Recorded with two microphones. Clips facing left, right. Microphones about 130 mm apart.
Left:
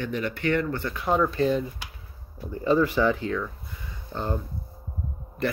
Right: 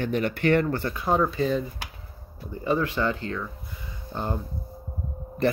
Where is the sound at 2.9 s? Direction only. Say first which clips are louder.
Left 4 dB; 10° left (ahead or behind).